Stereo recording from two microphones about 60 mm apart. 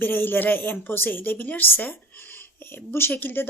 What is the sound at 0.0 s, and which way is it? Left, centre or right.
A woman's voice, left.